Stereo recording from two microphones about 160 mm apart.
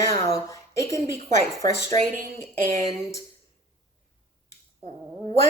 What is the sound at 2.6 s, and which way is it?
Speech, 20° left (ahead or behind).